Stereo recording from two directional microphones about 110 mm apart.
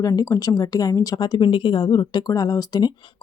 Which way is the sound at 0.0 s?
35° left (ahead or behind).